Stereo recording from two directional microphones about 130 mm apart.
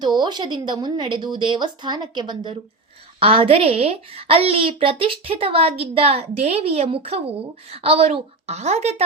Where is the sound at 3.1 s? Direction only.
45° right (ahead or behind).